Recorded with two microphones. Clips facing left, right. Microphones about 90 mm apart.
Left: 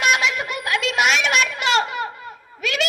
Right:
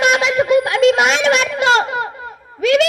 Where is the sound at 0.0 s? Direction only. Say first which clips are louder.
Right 6 dB; 30° right (ahead or behind).